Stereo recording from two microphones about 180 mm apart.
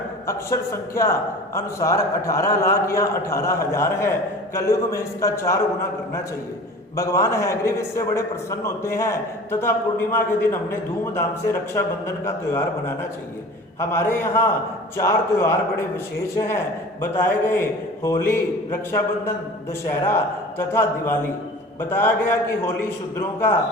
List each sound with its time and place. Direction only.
0.3 s a man's voice: 15° left (ahead or behind)
6.9 s a man's voice: 15° left (ahead or behind)
13.7 s a man's voice: 15° left (ahead or behind)
20.6 s a man's voice: 10° left (ahead or behind)